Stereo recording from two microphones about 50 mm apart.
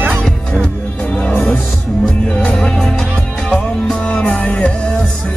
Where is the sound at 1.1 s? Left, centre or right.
Left.